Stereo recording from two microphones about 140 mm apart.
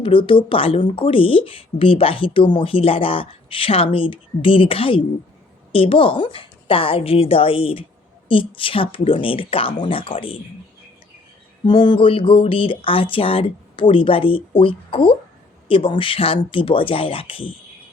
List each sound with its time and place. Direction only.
0.0 s speech: 40° left (ahead or behind)
11.6 s speech: 35° left (ahead or behind)